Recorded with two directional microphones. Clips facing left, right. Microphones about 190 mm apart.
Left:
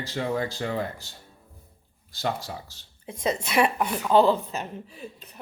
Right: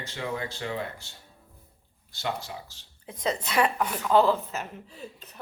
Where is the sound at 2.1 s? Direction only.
40° left (ahead or behind).